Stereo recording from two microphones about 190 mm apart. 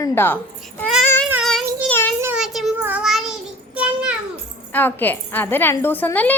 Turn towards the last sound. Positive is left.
turn(degrees=10)  # may be behind; listen again after turning